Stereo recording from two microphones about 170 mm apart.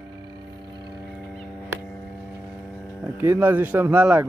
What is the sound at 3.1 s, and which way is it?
Speech, 15° right (ahead or behind).